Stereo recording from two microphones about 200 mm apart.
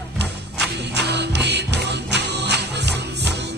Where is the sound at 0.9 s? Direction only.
60° right (ahead or behind).